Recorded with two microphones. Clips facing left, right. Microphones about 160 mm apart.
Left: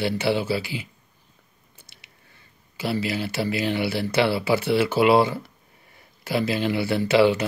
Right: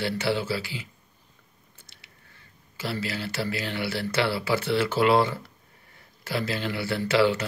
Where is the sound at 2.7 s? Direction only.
15° left (ahead or behind).